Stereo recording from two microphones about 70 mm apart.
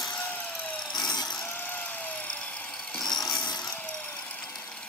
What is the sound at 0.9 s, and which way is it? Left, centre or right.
Power tool, left.